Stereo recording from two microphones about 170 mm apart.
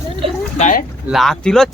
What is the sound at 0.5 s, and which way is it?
Speech, 45° left (ahead or behind).